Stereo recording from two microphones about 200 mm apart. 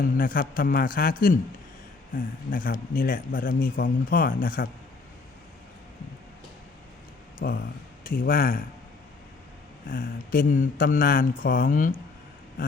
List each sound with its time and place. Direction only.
0.0 s speech: 45° left (ahead or behind)
7.4 s speech: 55° left (ahead or behind)
8.0 s speech: 45° left (ahead or behind)
9.9 s speech: 45° left (ahead or behind)